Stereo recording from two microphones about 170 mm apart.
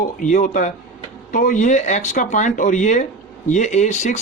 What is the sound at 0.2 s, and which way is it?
A man's voice, 50° left (ahead or behind).